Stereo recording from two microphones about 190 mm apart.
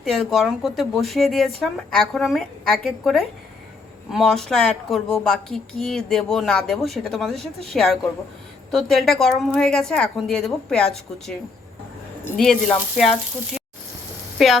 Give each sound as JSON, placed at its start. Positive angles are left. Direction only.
{"t": 0.0, "sound": "a woman's voice", "side_deg": 0}